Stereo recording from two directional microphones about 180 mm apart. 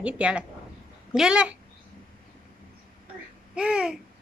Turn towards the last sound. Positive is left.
turn(degrees=-5)  # may be behind; listen again after turning